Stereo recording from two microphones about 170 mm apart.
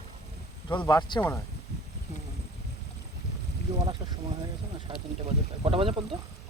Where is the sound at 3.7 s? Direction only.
25° right (ahead or behind).